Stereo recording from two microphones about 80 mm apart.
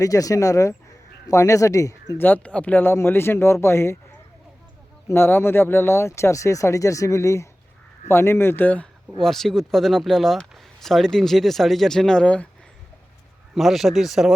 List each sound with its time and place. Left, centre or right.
0.0 s speech: left
2.1 s speech: left
5.0 s speech: left
9.2 s speech: centre
13.6 s speech: centre